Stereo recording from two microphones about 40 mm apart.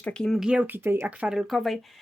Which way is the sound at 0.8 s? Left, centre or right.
Right.